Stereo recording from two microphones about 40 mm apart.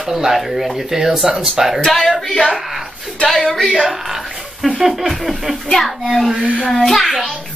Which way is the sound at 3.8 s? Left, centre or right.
Centre.